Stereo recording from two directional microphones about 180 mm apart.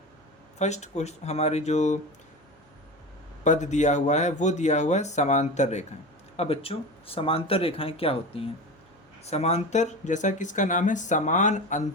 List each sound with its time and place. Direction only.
0.6 s speech: 40° left (ahead or behind)
3.4 s speech: 40° left (ahead or behind)